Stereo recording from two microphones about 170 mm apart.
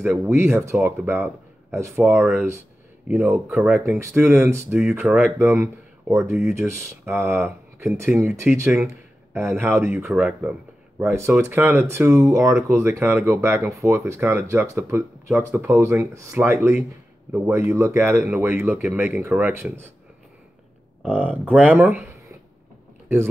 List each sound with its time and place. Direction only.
0.0 s speech: 10° right (ahead or behind)
3.5 s speech: centre (ahead or behind)
3.8 s speech: 15° right (ahead or behind)
4.7 s speech: centre (ahead or behind)
21.1 s speech: 10° right (ahead or behind)